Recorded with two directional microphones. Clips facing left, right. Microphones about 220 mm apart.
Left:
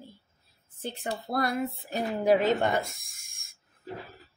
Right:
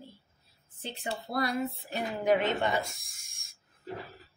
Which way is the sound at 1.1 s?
50° left (ahead or behind).